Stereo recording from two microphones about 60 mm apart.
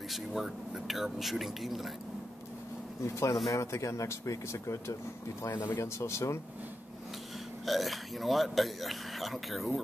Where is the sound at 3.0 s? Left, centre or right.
Left.